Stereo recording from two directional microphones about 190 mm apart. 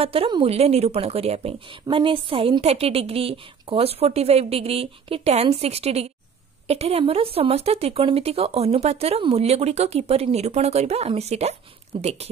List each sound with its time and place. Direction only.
0.0 s a woman's voice: 30° right (ahead or behind)